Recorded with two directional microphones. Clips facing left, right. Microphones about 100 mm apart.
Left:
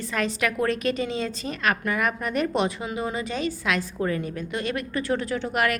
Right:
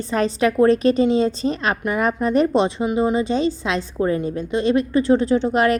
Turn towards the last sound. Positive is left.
turn(degrees=-30)  # may be behind; listen again after turning